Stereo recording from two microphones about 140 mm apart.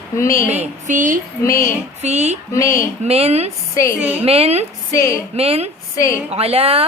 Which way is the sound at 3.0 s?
45° right (ahead or behind).